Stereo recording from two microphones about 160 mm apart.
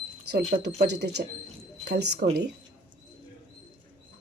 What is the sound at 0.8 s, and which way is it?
Speech, 90° right.